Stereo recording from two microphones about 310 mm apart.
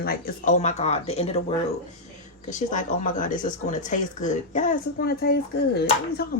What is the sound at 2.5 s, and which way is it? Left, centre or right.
Speech, left.